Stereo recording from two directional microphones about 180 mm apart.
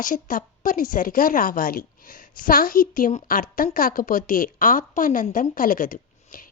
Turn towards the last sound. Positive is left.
turn(degrees=50)  # may be behind; listen again after turning